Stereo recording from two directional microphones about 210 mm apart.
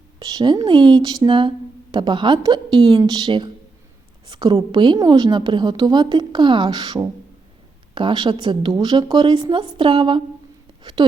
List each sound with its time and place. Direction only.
0.2 s speech: 20° right (ahead or behind)